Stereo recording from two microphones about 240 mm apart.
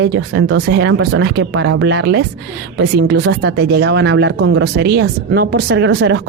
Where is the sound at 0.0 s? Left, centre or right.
Right.